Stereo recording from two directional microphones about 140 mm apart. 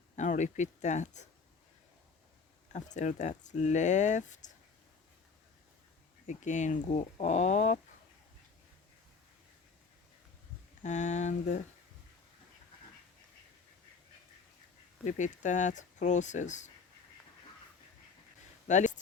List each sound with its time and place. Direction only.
0.2 s speech: 60° left (ahead or behind)
2.7 s speech: 60° left (ahead or behind)
6.2 s speech: 60° left (ahead or behind)
10.8 s speech: 60° left (ahead or behind)
15.0 s speech: 60° left (ahead or behind)
18.7 s speech: 60° left (ahead or behind)